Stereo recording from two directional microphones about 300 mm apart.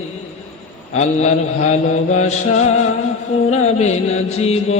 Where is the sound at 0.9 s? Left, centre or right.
Left.